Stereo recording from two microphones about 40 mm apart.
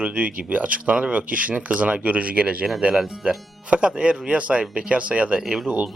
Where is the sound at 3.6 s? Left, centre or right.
Right.